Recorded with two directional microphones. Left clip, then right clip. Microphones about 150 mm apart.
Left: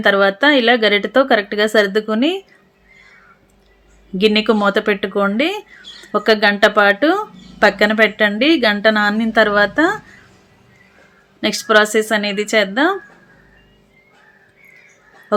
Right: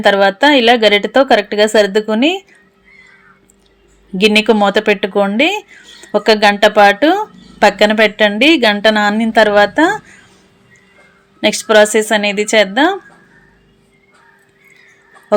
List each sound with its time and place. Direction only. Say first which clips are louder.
0.0 s speech: right 3 dB; 15° right (ahead or behind)
4.2 s speech: right 4 dB; 20° right (ahead or behind)
11.3 s speech: right 4 dB; 15° right (ahead or behind)